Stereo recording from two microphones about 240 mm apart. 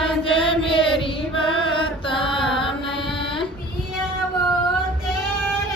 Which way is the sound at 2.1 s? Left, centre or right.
Left.